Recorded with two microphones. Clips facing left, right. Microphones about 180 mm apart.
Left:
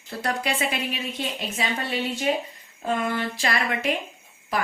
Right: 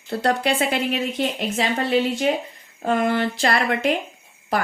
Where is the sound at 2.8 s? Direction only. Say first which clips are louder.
Right 5 dB; 55° right (ahead or behind).